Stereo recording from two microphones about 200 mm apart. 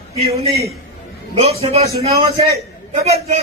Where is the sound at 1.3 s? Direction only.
30° right (ahead or behind).